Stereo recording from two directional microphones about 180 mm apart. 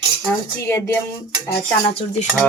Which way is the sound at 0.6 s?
15° left (ahead or behind).